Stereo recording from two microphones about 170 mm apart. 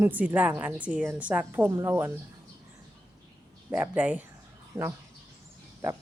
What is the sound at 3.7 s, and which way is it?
Speech, 10° right (ahead or behind).